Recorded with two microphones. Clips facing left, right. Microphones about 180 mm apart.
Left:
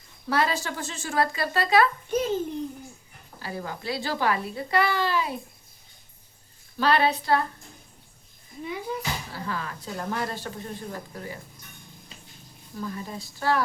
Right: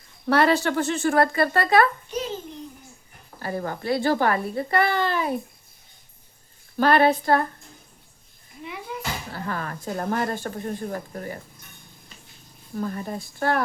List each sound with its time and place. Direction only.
0.3 s speech: 65° right (ahead or behind)
2.0 s a child's voice: 50° left (ahead or behind)
3.4 s speech: 50° right (ahead or behind)
6.7 s speech: 50° right (ahead or behind)
9.0 s speech: 50° right (ahead or behind)
12.7 s speech: 50° right (ahead or behind)